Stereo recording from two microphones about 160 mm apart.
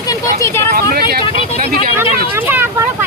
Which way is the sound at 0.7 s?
75° right (ahead or behind).